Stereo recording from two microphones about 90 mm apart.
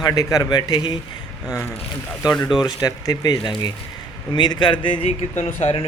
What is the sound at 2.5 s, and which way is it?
Speech, 55° left (ahead or behind).